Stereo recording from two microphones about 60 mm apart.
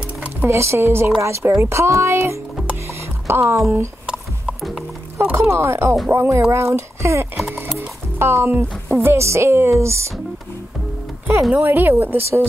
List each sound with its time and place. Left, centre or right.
0.5 s speech: right
4.0 s a sound: centre
5.3 s speech: right
11.5 s speech: right